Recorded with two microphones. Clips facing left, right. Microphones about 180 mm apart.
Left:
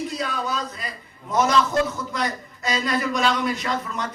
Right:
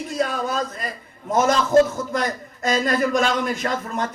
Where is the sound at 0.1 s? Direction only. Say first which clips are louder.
Right 4 dB; 50° right (ahead or behind).